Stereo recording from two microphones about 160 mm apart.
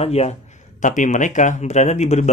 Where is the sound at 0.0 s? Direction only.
40° left (ahead or behind).